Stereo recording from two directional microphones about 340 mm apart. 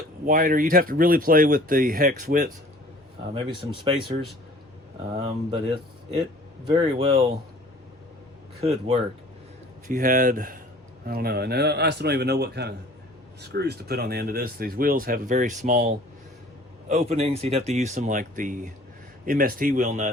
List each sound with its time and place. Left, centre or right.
0.3 s speech: right
9.8 s speech: right
16.9 s speech: centre